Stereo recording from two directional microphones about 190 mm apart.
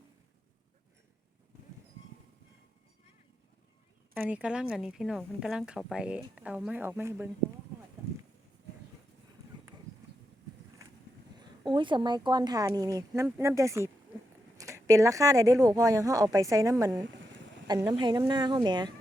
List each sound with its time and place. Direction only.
4.1 s speech: 10° right (ahead or behind)
10.8 s vehicle: 15° right (ahead or behind)
11.3 s a woman's voice: 25° right (ahead or behind)